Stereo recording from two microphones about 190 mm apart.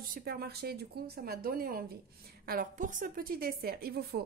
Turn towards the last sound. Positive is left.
turn(degrees=-55)  # may be behind; listen again after turning